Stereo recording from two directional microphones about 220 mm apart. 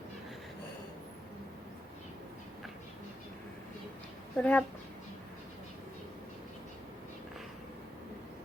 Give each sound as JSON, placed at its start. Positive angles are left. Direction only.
{"t": 4.4, "sound": "speech", "side_deg": 5}